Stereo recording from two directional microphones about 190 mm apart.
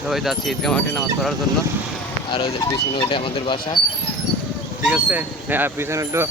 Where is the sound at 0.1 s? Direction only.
Centre (ahead or behind).